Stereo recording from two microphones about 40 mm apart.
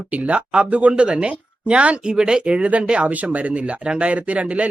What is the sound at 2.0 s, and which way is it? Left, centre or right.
Speech, centre.